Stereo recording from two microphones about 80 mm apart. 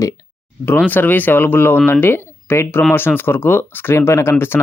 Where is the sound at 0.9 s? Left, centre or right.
Left.